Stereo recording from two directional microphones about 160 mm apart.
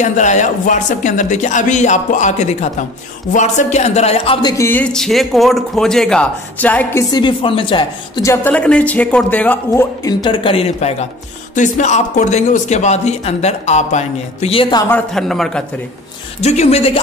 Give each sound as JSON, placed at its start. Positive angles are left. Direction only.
{"t": 0.0, "sound": "speech", "side_deg": 50}
{"t": 4.4, "sound": "a woman's voice", "side_deg": 25}
{"t": 4.6, "sound": "speech", "side_deg": 5}
{"t": 7.1, "sound": "a woman's voice", "side_deg": 30}
{"t": 8.3, "sound": "a man's voice", "side_deg": 10}
{"t": 10.0, "sound": "a woman's voice", "side_deg": 30}
{"t": 14.9, "sound": "speech", "side_deg": 5}
{"t": 16.3, "sound": "a woman's voice", "side_deg": 45}